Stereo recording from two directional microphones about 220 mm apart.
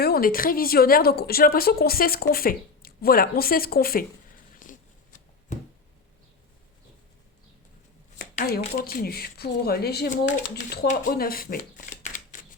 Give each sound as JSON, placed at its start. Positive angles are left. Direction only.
{"t": 0.0, "sound": "speech", "side_deg": 40}
{"t": 4.6, "sound": "a sound", "side_deg": 35}
{"t": 8.2, "sound": "speech", "side_deg": 40}
{"t": 12.3, "sound": "typewriter", "side_deg": 35}